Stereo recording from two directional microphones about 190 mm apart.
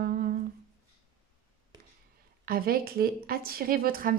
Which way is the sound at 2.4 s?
50° right (ahead or behind).